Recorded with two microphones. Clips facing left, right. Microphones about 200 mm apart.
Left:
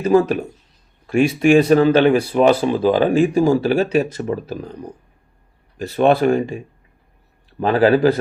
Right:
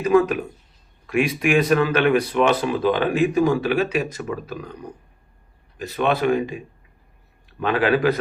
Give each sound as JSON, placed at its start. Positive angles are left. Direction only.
{"t": 0.0, "sound": "speech", "side_deg": 30}
{"t": 7.6, "sound": "speech", "side_deg": 35}